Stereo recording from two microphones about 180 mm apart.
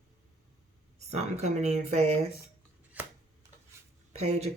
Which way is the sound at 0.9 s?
40° right (ahead or behind).